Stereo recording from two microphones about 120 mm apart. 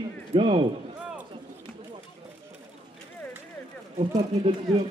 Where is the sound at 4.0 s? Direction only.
65° right (ahead or behind).